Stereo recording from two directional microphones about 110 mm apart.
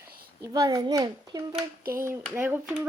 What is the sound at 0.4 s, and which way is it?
Speech, 35° right (ahead or behind).